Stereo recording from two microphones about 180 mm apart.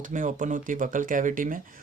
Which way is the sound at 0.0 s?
45° right (ahead or behind).